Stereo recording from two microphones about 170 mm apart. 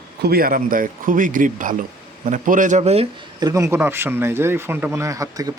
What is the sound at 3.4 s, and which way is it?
A man's voice, 20° right (ahead or behind).